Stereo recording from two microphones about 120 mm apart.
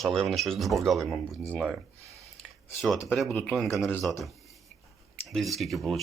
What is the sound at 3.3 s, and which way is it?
Speech, centre (ahead or behind).